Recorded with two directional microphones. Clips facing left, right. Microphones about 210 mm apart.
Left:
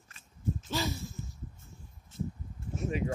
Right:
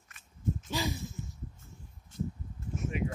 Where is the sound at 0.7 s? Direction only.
15° right (ahead or behind).